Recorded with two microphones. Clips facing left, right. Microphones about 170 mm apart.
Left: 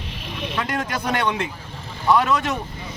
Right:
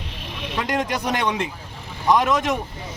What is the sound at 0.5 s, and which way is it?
Speech, 15° right (ahead or behind).